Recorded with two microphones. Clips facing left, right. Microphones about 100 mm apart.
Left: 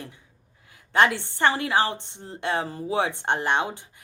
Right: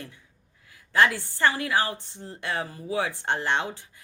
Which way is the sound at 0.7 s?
25° left (ahead or behind).